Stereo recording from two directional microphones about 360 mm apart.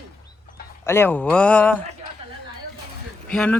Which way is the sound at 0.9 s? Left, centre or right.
Centre.